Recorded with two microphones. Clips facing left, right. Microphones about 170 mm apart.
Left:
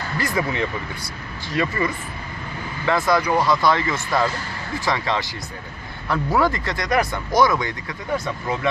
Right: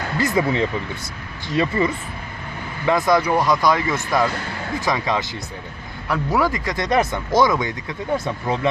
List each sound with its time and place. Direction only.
0.2 s speech: 25° right (ahead or behind); by 6.7 s 10° right (ahead or behind)
6.7 s speech: 25° right (ahead or behind)